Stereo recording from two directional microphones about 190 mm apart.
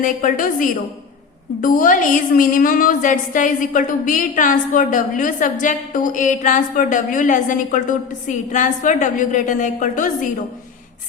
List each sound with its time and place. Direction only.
0.0 s a woman's voice: 45° left (ahead or behind)